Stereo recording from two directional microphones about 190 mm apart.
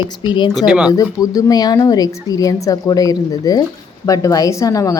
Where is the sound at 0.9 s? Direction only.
20° left (ahead or behind).